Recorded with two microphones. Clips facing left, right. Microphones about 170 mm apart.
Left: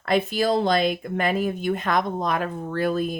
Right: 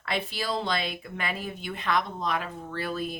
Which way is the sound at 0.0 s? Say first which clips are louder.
Left 10 dB; 45° left (ahead or behind).